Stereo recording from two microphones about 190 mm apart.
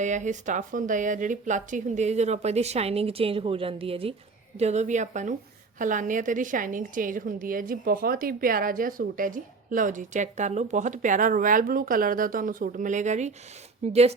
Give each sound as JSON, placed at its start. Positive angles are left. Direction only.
{"t": 0.0, "sound": "a woman's voice", "side_deg": -40}